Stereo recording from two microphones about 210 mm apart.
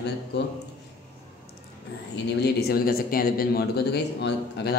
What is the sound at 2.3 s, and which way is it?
Speech, 50° left (ahead or behind).